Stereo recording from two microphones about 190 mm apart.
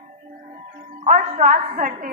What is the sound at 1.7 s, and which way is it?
Speech, 55° right (ahead or behind).